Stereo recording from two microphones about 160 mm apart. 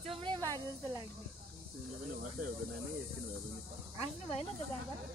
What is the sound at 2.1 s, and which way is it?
Speech, 70° right (ahead or behind).